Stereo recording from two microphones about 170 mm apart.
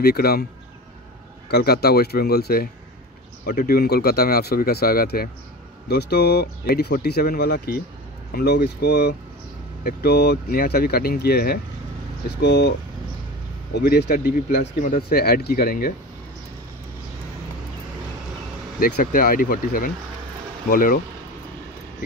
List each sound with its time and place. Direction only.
0.0 s speech: 65° left (ahead or behind)
1.5 s speech: 70° left (ahead or behind)
12.4 s speech: 85° left
13.7 s speech: 70° left (ahead or behind)
14.8 s speech: 55° left (ahead or behind)
18.8 s speech: 65° left (ahead or behind)